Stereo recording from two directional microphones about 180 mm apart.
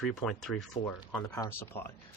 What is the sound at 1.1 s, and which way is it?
Speech, 15° left (ahead or behind).